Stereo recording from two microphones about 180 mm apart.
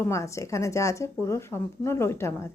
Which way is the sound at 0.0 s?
15° left (ahead or behind).